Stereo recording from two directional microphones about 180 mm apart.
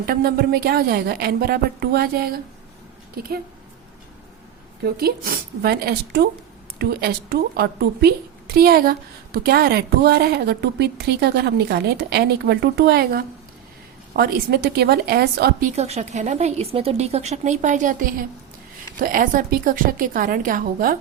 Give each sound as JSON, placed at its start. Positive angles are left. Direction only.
{"t": 0.0, "sound": "a woman's voice", "side_deg": -55}
{"t": 4.8, "sound": "a woman's voice", "side_deg": -60}
{"t": 15.7, "sound": "a woman's voice", "side_deg": -35}